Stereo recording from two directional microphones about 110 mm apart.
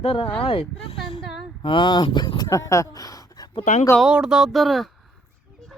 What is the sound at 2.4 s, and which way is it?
Speech, 30° left (ahead or behind).